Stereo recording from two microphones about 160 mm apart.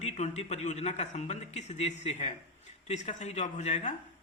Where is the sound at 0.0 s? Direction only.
45° left (ahead or behind).